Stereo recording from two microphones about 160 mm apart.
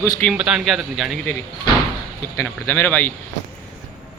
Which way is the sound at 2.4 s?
15° left (ahead or behind).